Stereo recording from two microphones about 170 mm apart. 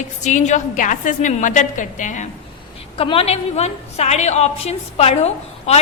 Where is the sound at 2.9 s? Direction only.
35° left (ahead or behind).